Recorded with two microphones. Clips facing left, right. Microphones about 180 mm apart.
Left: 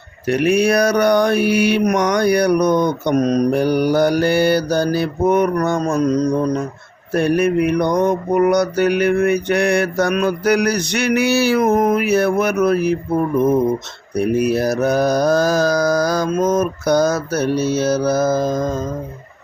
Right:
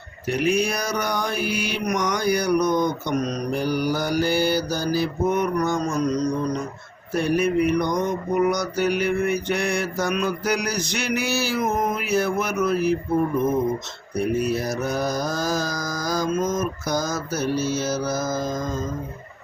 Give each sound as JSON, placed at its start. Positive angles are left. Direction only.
{"t": 0.3, "sound": "mantra", "side_deg": 65}
{"t": 14.2, "sound": "mantra", "side_deg": 70}